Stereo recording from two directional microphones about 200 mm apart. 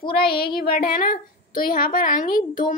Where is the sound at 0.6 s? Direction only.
50° left (ahead or behind).